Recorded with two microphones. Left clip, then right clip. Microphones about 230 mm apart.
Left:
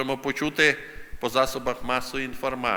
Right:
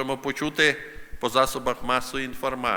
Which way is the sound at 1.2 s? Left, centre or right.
Centre.